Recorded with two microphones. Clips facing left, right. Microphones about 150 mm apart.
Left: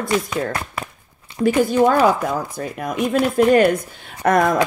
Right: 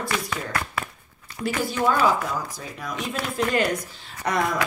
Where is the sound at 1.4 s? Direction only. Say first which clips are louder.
Left 9 dB; 50° left (ahead or behind).